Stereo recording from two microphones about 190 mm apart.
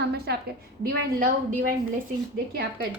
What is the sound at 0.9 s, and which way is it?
Speech, 45° right (ahead or behind).